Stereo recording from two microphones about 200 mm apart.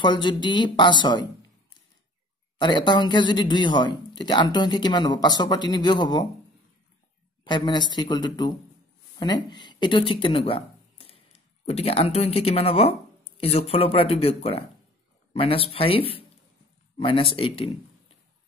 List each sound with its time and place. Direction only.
0.0 s speech: 25° left (ahead or behind)
2.6 s speech: 20° left (ahead or behind)
7.4 s speech: 20° left (ahead or behind)